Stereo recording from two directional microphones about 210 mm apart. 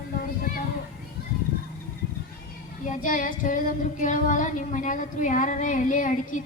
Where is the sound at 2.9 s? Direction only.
40° left (ahead or behind).